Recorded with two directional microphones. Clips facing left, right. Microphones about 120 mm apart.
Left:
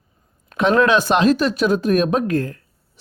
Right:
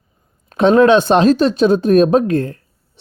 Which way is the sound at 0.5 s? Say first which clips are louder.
Right 6 dB; 30° right (ahead or behind).